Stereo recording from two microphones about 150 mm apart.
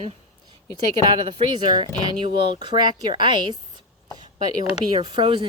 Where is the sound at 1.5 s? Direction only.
30° right (ahead or behind).